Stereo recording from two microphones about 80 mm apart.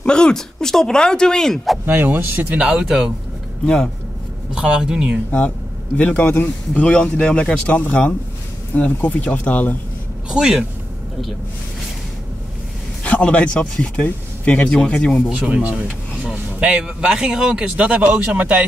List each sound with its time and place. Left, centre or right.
0.0 s speech: centre
1.9 s speech: right
2.6 s speech: centre
3.6 s speech: centre
4.6 s speech: centre
5.9 s speech: centre
10.3 s speech: centre
13.0 s speech: centre
15.3 s speech: centre